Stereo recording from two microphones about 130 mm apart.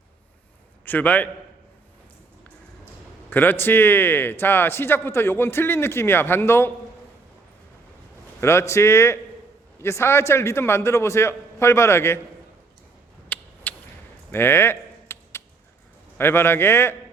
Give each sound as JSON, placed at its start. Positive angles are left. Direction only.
{"t": 0.9, "sound": "a man's voice", "side_deg": 15}
{"t": 3.2, "sound": "a man's voice", "side_deg": 15}
{"t": 8.4, "sound": "a man's voice", "side_deg": 20}
{"t": 13.2, "sound": "a sound", "side_deg": 10}
{"t": 16.1, "sound": "a man's voice", "side_deg": 15}